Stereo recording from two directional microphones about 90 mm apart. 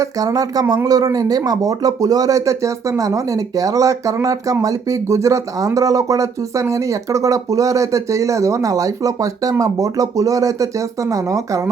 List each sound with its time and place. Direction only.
0.0 s speech: 40° right (ahead or behind)